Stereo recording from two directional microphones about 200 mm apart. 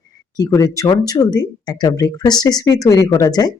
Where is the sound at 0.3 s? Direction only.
15° left (ahead or behind).